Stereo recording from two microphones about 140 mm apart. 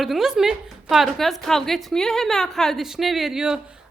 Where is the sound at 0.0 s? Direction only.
Centre (ahead or behind).